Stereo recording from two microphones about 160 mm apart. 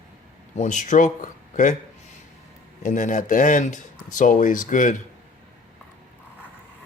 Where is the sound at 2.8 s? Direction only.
50° left (ahead or behind).